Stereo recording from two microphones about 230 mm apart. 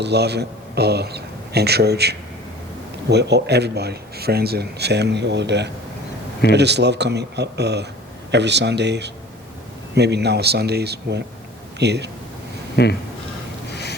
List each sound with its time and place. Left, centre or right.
0.0 s a man's voice: right
12.7 s speech: left